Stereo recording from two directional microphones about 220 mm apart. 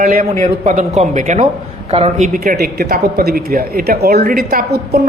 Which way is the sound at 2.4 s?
45° right (ahead or behind).